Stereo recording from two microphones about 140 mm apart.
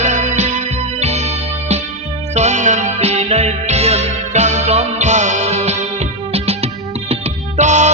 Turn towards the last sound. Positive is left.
turn(degrees=-55)  # may be behind; listen again after turning